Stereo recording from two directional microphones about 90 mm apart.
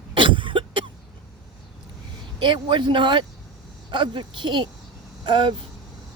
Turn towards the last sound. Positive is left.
turn(degrees=-60)  # may be behind; listen again after turning